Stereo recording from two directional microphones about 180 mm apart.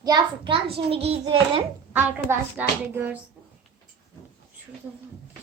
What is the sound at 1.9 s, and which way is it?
A woman's voice, 10° right (ahead or behind).